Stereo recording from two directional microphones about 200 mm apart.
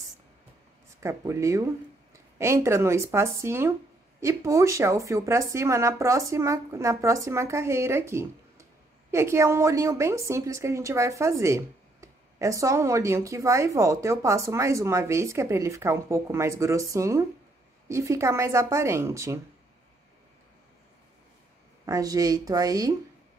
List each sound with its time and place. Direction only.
1.0 s a woman's voice: 15° right (ahead or behind)
21.8 s a woman's voice: 15° right (ahead or behind)